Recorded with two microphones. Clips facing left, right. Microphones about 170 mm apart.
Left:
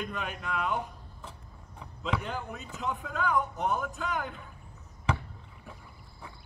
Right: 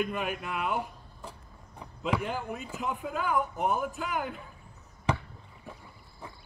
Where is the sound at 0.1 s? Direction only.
10° right (ahead or behind).